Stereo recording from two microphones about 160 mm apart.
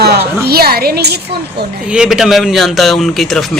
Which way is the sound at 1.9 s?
5° right (ahead or behind).